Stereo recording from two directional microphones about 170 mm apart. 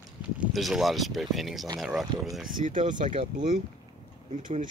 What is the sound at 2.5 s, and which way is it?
Speech, 50° right (ahead or behind).